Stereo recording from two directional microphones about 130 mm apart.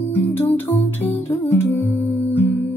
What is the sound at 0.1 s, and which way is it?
Music, 15° left (ahead or behind).